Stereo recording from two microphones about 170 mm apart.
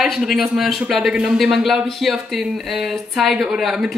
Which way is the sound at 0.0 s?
Centre (ahead or behind).